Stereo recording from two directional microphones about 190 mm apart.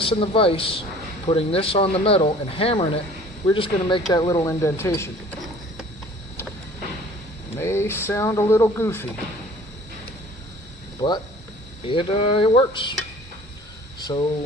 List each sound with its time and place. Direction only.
0.0 s a man's voice: 30° left (ahead or behind)
7.5 s speech: 15° left (ahead or behind)
11.0 s a man's voice: 20° left (ahead or behind)
14.1 s a man's voice: 25° left (ahead or behind)